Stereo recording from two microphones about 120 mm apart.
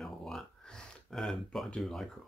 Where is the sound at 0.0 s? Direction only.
5° left (ahead or behind).